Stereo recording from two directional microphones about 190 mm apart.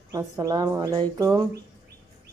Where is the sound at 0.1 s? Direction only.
15° right (ahead or behind).